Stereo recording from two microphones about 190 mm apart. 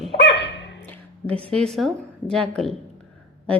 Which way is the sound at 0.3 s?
70° left (ahead or behind).